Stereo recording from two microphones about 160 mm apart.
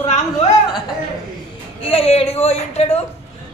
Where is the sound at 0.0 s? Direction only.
40° left (ahead or behind).